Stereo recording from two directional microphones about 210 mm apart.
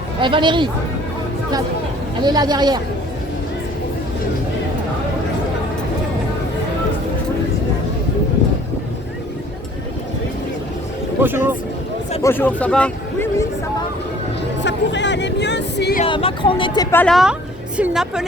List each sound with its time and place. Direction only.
0.2 s speech: 25° right (ahead or behind)
2.2 s speech: 20° right (ahead or behind)
11.2 s speech: 10° right (ahead or behind)
12.2 s a man's voice: 10° left (ahead or behind)
14.6 s music: 55° left (ahead or behind)
16.0 s a woman's voice: 25° left (ahead or behind); by 18.3 s 5° right (ahead or behind)